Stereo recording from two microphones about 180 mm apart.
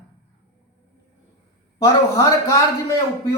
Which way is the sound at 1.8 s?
20° left (ahead or behind).